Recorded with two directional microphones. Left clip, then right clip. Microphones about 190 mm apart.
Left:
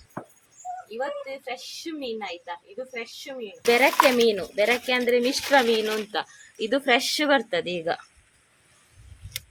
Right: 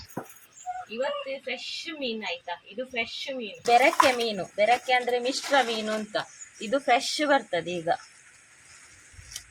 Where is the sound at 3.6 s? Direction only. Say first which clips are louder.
Left 1 dB; 60° left (ahead or behind).